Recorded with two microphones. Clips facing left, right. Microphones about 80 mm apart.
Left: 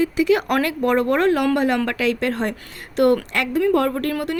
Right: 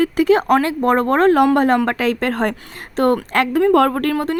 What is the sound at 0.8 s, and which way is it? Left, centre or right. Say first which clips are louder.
A woman's voice: right 2 dB; right.